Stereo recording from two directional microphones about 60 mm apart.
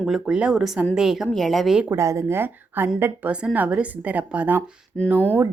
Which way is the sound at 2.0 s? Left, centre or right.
Right.